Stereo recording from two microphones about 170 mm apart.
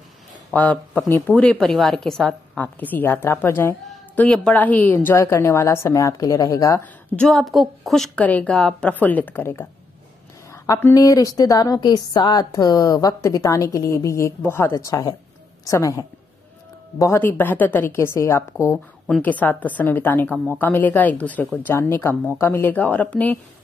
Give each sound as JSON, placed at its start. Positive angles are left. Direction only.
{"t": 0.5, "sound": "a woman's voice", "side_deg": 10}
{"t": 7.2, "sound": "a woman's voice", "side_deg": 0}
{"t": 19.0, "sound": "a woman's voice", "side_deg": 5}